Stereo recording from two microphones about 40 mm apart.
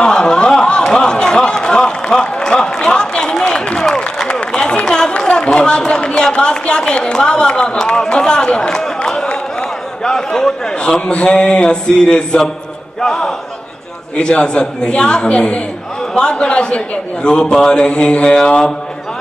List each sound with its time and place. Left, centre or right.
0.0 s a sound: centre
4.3 s run: left
5.1 s a man's voice: left
9.0 s a sound: centre
11.0 s a man's voice: left; by 13.3 s centre
14.1 s a man's voice: left